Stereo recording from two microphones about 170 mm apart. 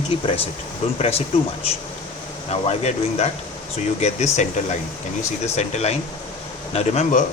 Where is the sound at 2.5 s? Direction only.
40° left (ahead or behind).